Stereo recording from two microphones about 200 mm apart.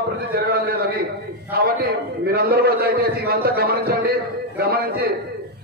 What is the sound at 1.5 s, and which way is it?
A man's voice, 50° right (ahead or behind).